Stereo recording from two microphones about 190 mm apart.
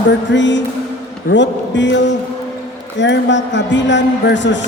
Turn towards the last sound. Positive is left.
turn(degrees=70)  # may be behind; listen again after turning